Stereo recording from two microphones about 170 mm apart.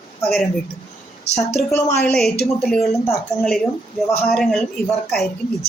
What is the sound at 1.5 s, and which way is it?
Speech, 15° left (ahead or behind).